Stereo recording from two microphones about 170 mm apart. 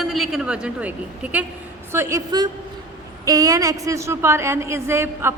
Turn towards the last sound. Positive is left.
turn(degrees=-15)  # may be behind; listen again after turning